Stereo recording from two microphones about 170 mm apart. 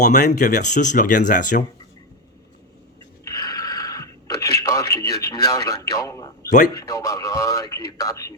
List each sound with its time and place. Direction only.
0.0 s speech: 45° left (ahead or behind)
3.2 s a sound: 20° left (ahead or behind)
4.6 s a man's voice: 20° left (ahead or behind)